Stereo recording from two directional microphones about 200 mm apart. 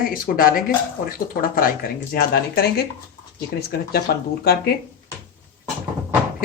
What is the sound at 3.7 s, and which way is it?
Speech, 50° left (ahead or behind).